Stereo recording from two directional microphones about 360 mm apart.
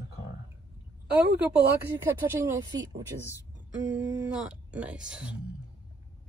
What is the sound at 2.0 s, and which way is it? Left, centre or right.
Speech, centre.